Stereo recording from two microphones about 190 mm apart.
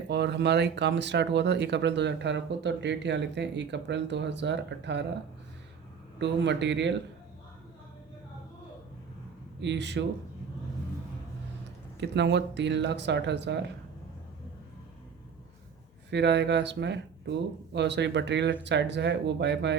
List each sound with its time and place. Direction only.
0.1 s speech: 65° right (ahead or behind)
6.1 s speech: 65° right (ahead or behind)
9.6 s speech: 65° right (ahead or behind)
11.9 s speech: 65° right (ahead or behind)
16.0 s speech: 65° right (ahead or behind)